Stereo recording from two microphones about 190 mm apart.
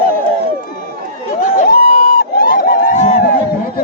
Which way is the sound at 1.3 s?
45° left (ahead or behind).